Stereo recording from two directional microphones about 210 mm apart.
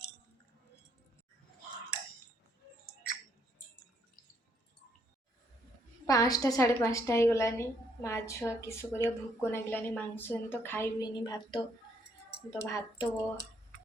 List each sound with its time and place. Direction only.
6.1 s a woman's voice: 15° left (ahead or behind)